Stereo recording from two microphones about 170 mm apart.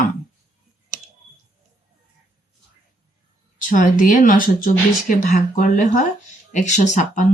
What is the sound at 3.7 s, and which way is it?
Speech, 50° left (ahead or behind).